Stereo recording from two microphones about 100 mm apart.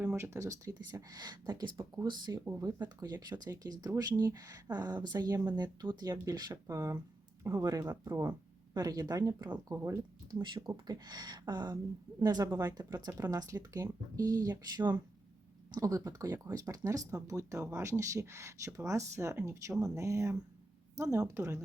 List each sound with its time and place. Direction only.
0.0 s a sound: 20° right (ahead or behind)
0.3 s speech: 30° right (ahead or behind); by 2.4 s 45° right (ahead or behind)
2.4 s speech: 25° right (ahead or behind)
2.6 s speech: 40° right (ahead or behind)
8.7 s speech: 40° right (ahead or behind)
9.7 s speech: 25° right (ahead or behind)
10.4 s speech: 50° right (ahead or behind)
10.7 s speech: 40° right (ahead or behind)